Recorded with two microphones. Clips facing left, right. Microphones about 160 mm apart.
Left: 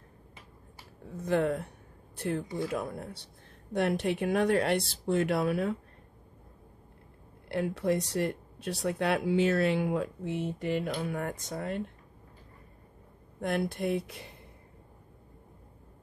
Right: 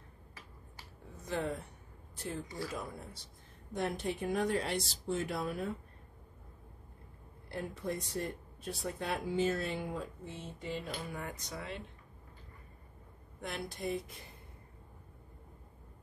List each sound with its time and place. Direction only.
1.2 s speech: 60° left (ahead or behind)
7.4 s speech: 75° left (ahead or behind); by 11.8 s 50° left (ahead or behind)
13.4 s speech: 55° left (ahead or behind); by 14.3 s 75° left (ahead or behind)